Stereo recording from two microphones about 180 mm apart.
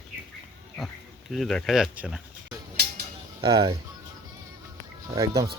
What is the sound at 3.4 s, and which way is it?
Speech, 30° right (ahead or behind).